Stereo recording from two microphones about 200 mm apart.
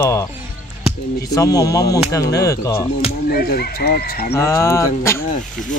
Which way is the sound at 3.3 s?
50° left (ahead or behind).